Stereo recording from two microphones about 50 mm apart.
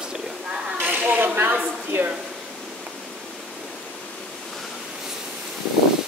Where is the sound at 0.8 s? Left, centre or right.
Right.